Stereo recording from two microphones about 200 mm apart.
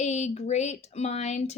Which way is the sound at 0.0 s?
35° left (ahead or behind).